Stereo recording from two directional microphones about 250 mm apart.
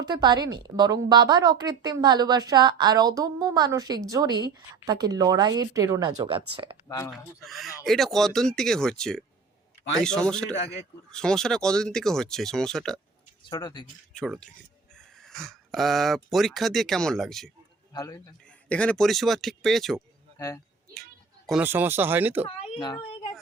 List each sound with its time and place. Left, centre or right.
0.0 s a woman's voice: centre
6.8 s speech: centre
7.4 s speech: centre
13.5 s speech: centre
14.1 s speech: centre
17.9 s speech: centre
22.4 s speech: left